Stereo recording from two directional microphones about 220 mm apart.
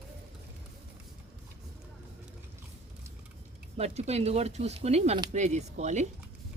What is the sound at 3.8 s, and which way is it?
Speech, 30° right (ahead or behind).